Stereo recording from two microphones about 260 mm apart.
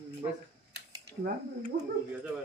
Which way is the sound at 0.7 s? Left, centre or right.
Right.